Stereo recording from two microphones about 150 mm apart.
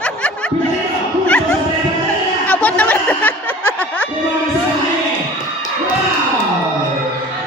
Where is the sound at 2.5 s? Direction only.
10° left (ahead or behind).